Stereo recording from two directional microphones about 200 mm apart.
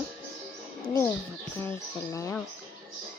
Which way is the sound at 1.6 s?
15° left (ahead or behind).